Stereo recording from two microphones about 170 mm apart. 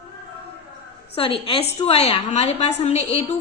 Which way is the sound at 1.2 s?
30° left (ahead or behind).